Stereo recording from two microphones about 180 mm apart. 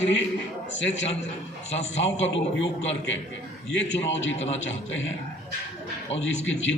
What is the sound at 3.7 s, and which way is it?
A man's voice, 90° left.